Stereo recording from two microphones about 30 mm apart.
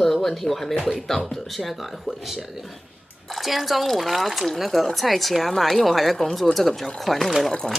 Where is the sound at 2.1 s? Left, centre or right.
Centre.